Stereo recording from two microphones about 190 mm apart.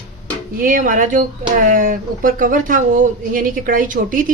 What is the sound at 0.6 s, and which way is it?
Speech, 45° right (ahead or behind).